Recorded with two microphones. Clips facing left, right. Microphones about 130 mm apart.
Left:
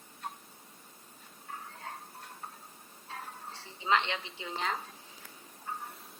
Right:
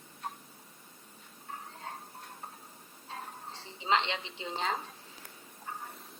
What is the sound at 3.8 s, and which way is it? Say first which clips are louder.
Speech: even; 30° right (ahead or behind).